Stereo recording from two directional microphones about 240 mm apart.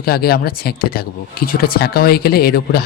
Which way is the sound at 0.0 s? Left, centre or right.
Left.